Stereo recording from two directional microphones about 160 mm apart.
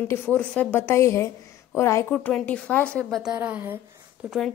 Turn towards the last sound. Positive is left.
turn(degrees=0)  # may be behind; listen again after turning